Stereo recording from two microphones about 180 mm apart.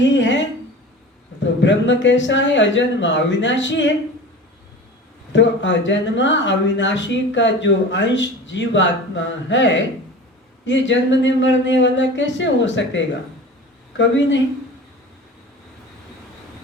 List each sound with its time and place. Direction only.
0.0 s a woman's voice: 90° left
1.6 s speech: 90° left
5.3 s speech: 90° left